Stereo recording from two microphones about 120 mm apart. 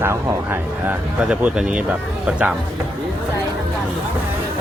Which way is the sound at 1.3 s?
5° right (ahead or behind).